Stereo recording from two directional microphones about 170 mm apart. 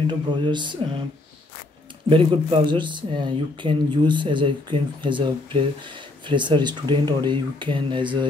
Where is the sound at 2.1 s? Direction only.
30° right (ahead or behind).